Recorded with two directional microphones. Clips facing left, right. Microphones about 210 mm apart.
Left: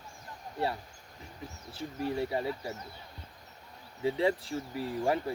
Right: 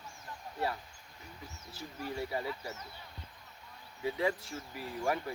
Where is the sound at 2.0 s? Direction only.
25° left (ahead or behind).